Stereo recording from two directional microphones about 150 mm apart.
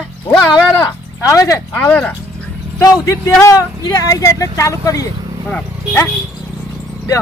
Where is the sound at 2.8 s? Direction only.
20° left (ahead or behind).